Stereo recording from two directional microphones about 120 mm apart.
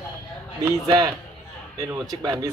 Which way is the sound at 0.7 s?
30° right (ahead or behind).